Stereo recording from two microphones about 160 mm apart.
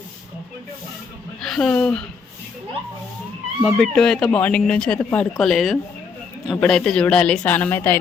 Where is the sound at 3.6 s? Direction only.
5° left (ahead or behind).